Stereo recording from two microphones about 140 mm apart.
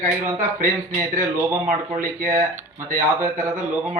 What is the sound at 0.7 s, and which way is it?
Speech, 20° right (ahead or behind).